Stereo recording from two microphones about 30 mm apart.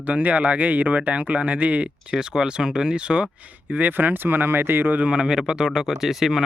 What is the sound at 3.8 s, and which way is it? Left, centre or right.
Speech, right.